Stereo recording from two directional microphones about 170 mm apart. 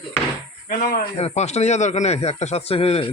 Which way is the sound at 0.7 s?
60° left (ahead or behind).